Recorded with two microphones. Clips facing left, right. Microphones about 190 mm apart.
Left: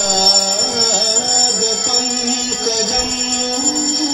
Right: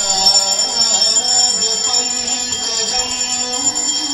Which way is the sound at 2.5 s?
50° left (ahead or behind).